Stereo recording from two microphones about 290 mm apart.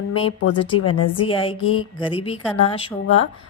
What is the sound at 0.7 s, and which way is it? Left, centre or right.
Speech, left.